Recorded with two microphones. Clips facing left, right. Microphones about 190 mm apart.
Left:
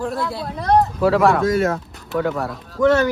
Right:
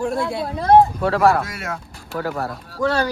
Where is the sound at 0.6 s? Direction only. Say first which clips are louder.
Right 2 dB; centre (ahead or behind).